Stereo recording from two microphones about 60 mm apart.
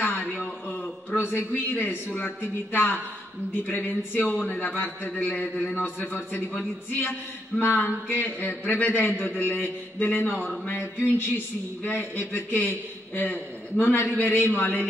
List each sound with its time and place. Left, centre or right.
0.0 s a sound: left
3.6 s a man's voice: left
7.6 s a man's voice: left